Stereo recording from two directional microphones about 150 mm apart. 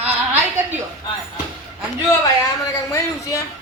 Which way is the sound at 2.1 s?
25° left (ahead or behind).